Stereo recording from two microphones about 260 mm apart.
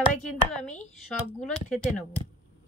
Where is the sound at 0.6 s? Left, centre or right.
Left.